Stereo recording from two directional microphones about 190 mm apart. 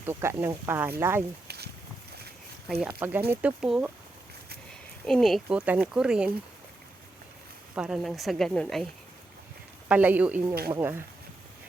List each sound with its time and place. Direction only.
0.0 s speech: 15° right (ahead or behind)
1.5 s a sound: 55° right (ahead or behind)
3.0 s speech: 10° right (ahead or behind)
5.0 s speech: centre (ahead or behind)
7.8 s speech: centre (ahead or behind)
9.9 s speech: 10° right (ahead or behind)